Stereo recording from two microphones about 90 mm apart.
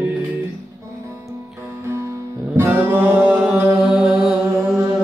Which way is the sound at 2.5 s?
25° right (ahead or behind).